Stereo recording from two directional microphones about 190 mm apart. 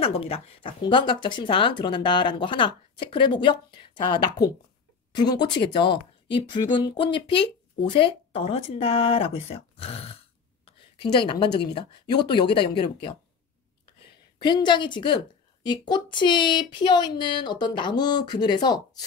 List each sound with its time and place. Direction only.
0.0 s speech: 30° left (ahead or behind)
14.4 s speech: 25° left (ahead or behind)